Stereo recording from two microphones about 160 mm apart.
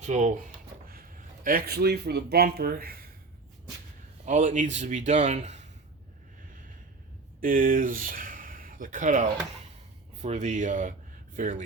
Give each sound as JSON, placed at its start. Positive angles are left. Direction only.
{"t": 0.0, "sound": "a man's voice", "side_deg": -50}
{"t": 1.5, "sound": "speech", "side_deg": -70}
{"t": 4.3, "sound": "a man's voice", "side_deg": -50}
{"t": 7.4, "sound": "a man's voice", "side_deg": -60}